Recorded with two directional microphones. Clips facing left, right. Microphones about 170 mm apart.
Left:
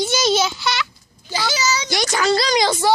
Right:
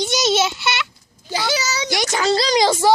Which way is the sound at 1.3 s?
70° right (ahead or behind).